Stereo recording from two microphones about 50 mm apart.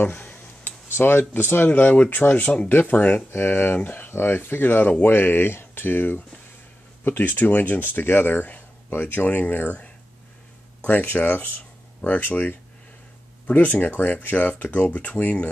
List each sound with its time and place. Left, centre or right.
0.0 s a sound: left
1.7 s speech: left
3.3 s speech: left
10.9 s speech: left
13.5 s speech: left